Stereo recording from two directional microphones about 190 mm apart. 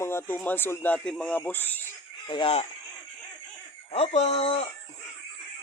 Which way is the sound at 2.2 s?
25° left (ahead or behind).